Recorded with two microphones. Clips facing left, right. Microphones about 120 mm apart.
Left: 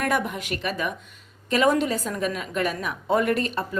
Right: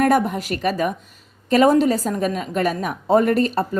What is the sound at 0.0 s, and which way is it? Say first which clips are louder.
A woman's voice: right 8 dB; 40° right (ahead or behind).